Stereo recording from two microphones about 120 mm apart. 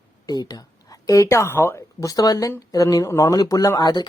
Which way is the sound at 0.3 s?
35° left (ahead or behind).